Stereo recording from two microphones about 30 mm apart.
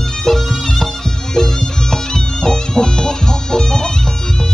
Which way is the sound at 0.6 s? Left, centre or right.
Centre.